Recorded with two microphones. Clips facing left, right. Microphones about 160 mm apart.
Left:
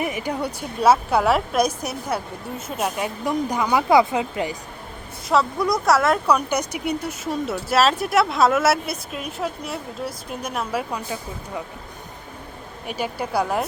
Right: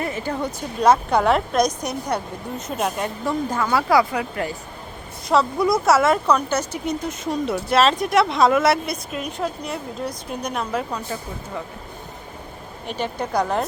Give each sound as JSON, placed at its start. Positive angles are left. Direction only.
{"t": 0.0, "sound": "speech", "side_deg": 15}
{"t": 3.2, "sound": "speech", "side_deg": 15}
{"t": 5.3, "sound": "speech", "side_deg": 0}
{"t": 6.2, "sound": "speech", "side_deg": 10}
{"t": 12.9, "sound": "speech", "side_deg": 10}